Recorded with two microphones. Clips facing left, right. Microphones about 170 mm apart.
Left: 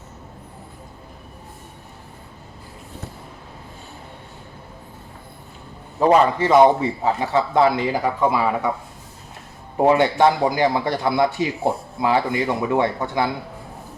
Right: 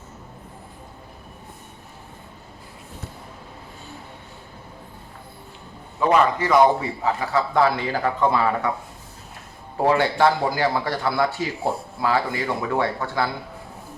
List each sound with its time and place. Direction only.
6.0 s speech: 30° left (ahead or behind); by 8.7 s 10° left (ahead or behind)
9.7 s speech: 20° left (ahead or behind)